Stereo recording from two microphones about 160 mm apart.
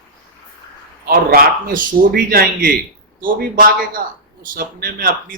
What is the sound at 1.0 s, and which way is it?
A man's voice, 70° right (ahead or behind).